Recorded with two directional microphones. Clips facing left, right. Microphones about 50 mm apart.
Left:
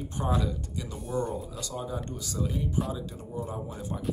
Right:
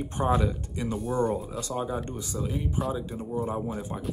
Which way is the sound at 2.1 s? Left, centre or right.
Right.